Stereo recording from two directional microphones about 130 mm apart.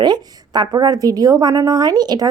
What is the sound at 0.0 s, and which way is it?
Speech, 35° right (ahead or behind).